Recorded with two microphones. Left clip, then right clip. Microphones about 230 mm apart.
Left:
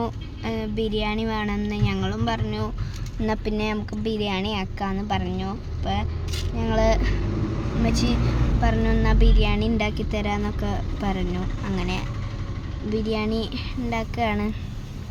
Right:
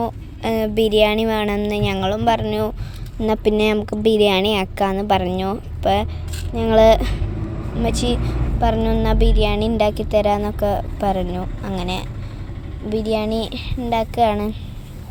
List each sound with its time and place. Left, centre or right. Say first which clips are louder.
0.4 s a woman's voice: right 9 dB; right
3.2 s a woman's voice: right 9 dB; centre
7.9 s speech: right 5 dB; centre